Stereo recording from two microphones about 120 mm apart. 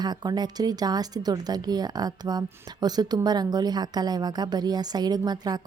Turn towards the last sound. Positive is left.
turn(degrees=-35)  # may be behind; listen again after turning